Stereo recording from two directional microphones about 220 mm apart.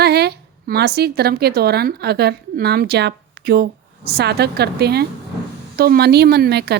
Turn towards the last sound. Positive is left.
turn(degrees=-50)  # may be behind; listen again after turning